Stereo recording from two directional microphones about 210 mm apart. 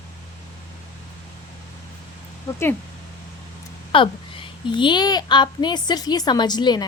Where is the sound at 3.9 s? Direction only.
25° left (ahead or behind).